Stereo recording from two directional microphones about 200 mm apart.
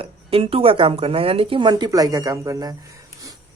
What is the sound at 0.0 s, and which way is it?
Speech, 30° right (ahead or behind).